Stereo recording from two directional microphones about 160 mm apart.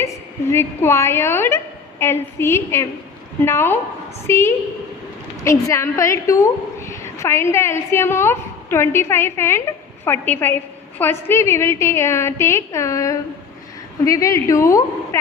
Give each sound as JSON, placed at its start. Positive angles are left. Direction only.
{"t": 0.0, "sound": "a woman's voice", "side_deg": 15}